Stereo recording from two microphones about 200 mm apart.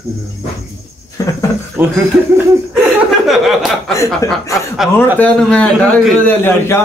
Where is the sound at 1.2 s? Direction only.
15° left (ahead or behind).